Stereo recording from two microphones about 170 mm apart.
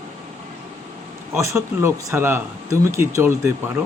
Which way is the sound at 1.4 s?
15° right (ahead or behind).